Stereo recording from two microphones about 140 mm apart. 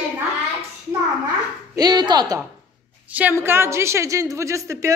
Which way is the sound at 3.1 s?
15° right (ahead or behind).